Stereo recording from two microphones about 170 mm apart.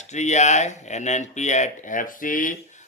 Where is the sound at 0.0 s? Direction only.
45° left (ahead or behind).